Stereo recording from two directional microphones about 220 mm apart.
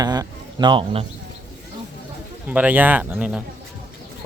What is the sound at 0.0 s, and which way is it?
Speech, 20° right (ahead or behind).